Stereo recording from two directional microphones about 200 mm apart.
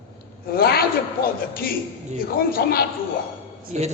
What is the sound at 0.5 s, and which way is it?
Speech, 50° left (ahead or behind).